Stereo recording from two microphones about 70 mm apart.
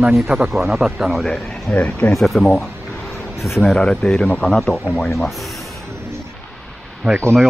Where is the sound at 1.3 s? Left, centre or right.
Centre.